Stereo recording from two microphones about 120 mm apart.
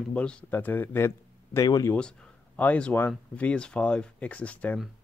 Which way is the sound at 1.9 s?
10° left (ahead or behind).